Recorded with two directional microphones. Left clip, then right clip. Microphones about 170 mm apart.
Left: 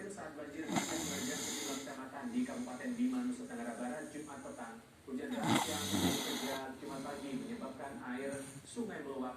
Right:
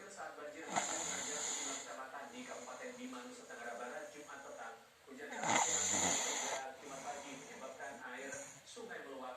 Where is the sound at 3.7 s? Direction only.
10° right (ahead or behind).